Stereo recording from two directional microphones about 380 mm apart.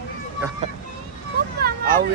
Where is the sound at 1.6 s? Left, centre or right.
Right.